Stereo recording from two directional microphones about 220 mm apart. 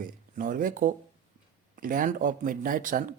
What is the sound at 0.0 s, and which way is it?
Speech, 35° right (ahead or behind).